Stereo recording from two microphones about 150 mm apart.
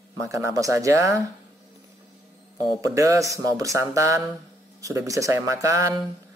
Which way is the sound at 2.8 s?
20° right (ahead or behind).